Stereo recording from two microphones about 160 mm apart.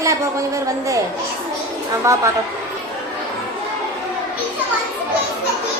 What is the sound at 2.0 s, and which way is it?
Speech, 20° right (ahead or behind).